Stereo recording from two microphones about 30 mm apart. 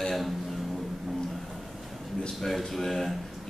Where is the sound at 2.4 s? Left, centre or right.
Centre.